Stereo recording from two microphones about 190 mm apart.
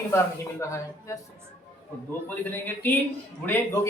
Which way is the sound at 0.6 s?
15° left (ahead or behind).